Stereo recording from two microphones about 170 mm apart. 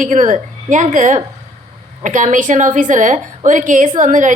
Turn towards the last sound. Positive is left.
turn(degrees=-50)  # may be behind; listen again after turning